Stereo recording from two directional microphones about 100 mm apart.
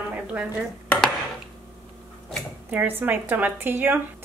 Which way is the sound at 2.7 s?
20° right (ahead or behind).